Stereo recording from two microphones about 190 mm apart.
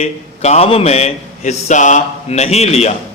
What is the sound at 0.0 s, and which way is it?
A man's voice, 35° left (ahead or behind).